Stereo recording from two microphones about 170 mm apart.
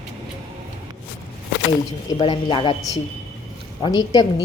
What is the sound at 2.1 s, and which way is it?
A woman's voice, 30° left (ahead or behind).